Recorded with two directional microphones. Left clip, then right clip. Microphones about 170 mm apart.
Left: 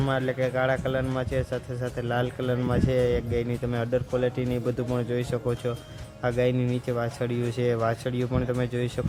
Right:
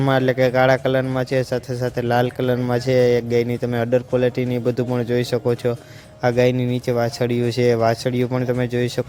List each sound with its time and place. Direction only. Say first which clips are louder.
0.1 s speech: right 11 dB; 35° right (ahead or behind)